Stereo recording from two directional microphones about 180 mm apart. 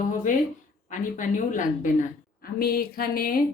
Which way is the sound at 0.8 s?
45° left (ahead or behind).